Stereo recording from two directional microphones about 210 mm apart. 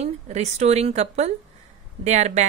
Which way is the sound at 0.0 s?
30° right (ahead or behind).